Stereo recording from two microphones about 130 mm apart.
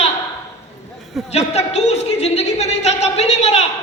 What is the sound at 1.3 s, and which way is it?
Speech, 55° left (ahead or behind).